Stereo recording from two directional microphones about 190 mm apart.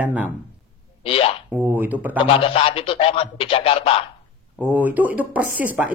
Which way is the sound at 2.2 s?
30° left (ahead or behind).